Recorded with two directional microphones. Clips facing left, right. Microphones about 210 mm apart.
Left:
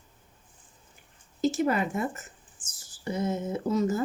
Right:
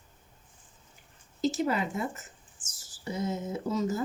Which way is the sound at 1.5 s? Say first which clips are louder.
Left 3 dB; 55° left (ahead or behind).